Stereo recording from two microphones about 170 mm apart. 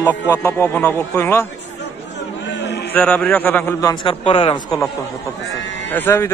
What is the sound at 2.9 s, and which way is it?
A man's voice, 10° left (ahead or behind).